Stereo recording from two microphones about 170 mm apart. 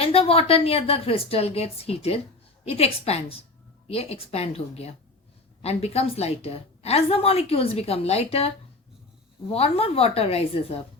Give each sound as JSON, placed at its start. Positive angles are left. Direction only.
{"t": 0.0, "sound": "a woman's voice", "side_deg": 35}
{"t": 9.5, "sound": "a woman's voice", "side_deg": 35}